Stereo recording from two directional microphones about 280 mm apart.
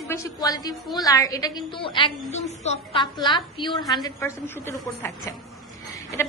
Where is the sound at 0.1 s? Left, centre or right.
Centre.